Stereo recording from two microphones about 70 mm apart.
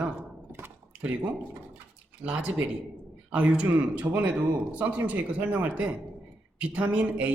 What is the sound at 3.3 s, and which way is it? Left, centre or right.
Speech, centre.